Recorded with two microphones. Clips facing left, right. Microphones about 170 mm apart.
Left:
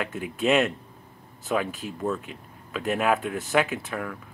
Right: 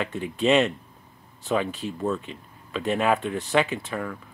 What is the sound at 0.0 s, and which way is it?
Speech, centre (ahead or behind).